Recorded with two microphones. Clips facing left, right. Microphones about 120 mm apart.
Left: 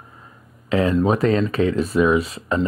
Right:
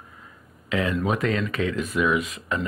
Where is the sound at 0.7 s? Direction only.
35° left (ahead or behind).